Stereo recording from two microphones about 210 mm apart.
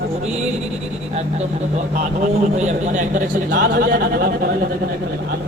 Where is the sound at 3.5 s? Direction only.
50° right (ahead or behind).